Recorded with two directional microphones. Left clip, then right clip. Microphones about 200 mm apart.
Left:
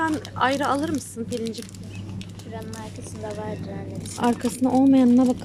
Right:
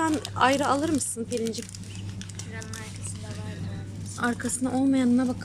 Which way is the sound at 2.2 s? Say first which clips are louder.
Left 3 dB; 25° left (ahead or behind).